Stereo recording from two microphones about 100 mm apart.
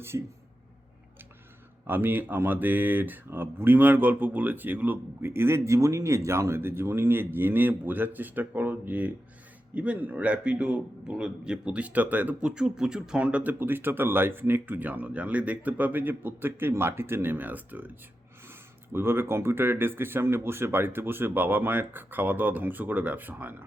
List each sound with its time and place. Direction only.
0.1 s speech: 30° right (ahead or behind)
1.9 s a man's voice: 20° right (ahead or behind)
18.9 s speech: 25° right (ahead or behind)